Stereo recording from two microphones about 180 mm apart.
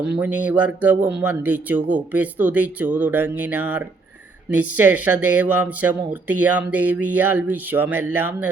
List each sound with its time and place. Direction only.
0.0 s speech: 5° right (ahead or behind)